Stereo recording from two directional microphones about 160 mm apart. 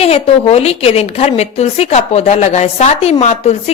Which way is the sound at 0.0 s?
40° left (ahead or behind).